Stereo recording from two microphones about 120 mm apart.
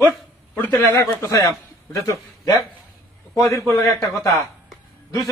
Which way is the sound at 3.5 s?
25° left (ahead or behind).